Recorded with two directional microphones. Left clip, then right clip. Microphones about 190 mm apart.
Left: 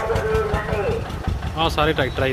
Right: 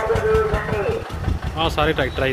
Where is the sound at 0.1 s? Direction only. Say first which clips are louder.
Right 4 dB; 55° right (ahead or behind).